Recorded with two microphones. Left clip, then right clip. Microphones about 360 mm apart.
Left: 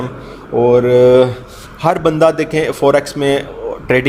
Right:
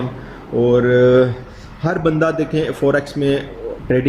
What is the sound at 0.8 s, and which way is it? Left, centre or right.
Mantra, left.